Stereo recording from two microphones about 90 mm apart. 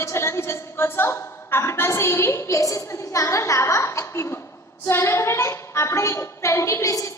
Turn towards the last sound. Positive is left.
turn(degrees=35)  # may be behind; listen again after turning